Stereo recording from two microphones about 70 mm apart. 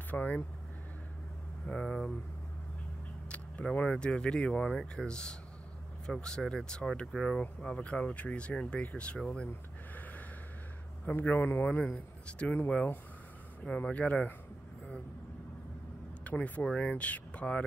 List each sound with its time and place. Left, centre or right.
0.1 s speech: left
1.7 s speech: centre
3.3 s speech: centre
11.1 s speech: left
16.3 s speech: left